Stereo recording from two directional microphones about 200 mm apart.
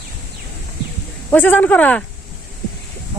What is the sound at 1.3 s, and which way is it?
Speech, 10° left (ahead or behind).